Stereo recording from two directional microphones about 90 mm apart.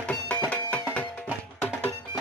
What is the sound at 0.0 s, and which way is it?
Music, 15° left (ahead or behind).